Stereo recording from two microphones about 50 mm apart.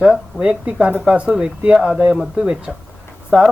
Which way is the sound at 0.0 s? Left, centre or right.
Centre.